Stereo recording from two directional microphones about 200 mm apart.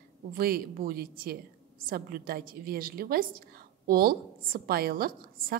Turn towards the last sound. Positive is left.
turn(degrees=-45)  # may be behind; listen again after turning